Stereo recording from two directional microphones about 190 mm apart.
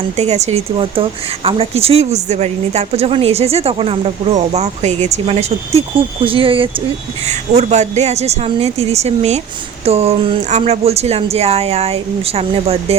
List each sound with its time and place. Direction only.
0.2 s a woman's voice: 35° right (ahead or behind)